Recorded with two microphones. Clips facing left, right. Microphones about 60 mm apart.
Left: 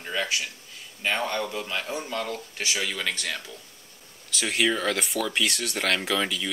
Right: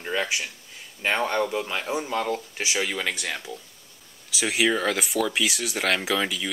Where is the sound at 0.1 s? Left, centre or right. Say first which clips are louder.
Right 2 dB; right.